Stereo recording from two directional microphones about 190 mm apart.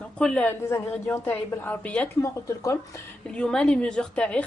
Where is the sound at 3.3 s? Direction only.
5° left (ahead or behind).